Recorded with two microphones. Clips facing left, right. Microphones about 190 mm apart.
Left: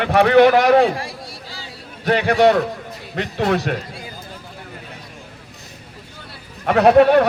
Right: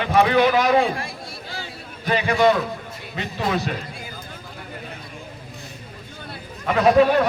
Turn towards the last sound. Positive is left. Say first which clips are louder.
# left 4 dB
turn(degrees=65)  # may be behind; listen again after turning